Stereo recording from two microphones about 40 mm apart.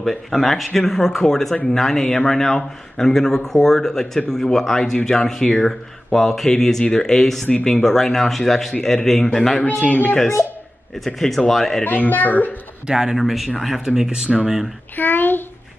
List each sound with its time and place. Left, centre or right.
0.0 s a man's voice: centre
11.1 s speech: centre
11.8 s a child's voice: left
12.8 s speech: centre
13.2 s speech: centre
13.8 s speech: centre
15.0 s a sound: left